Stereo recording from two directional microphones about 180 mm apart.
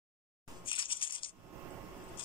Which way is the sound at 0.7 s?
30° left (ahead or behind).